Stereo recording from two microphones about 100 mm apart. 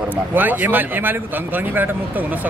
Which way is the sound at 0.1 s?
20° right (ahead or behind).